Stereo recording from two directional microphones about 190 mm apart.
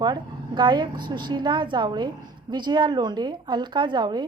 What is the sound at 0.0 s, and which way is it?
A woman's voice, 25° right (ahead or behind).